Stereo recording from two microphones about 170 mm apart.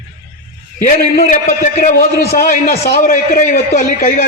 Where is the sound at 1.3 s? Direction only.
50° left (ahead or behind).